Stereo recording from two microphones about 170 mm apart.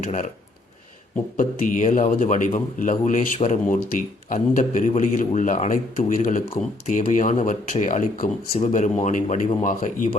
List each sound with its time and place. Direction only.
0.0 s speech: 45° left (ahead or behind)
1.4 s speech: 50° left (ahead or behind)